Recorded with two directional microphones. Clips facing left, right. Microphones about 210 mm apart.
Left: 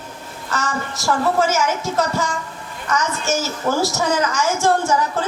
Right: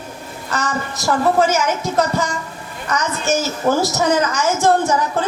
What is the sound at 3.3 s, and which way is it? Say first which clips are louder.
Speech: right 4 dB; 20° right (ahead or behind).